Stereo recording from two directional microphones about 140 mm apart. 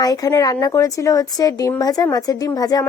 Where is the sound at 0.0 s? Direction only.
25° left (ahead or behind).